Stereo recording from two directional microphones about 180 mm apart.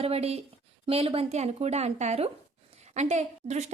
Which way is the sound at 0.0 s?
35° right (ahead or behind).